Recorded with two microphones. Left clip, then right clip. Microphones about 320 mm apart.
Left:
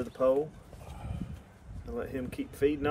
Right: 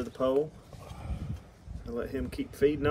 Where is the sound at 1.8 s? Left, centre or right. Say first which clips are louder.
Right 2 dB; centre.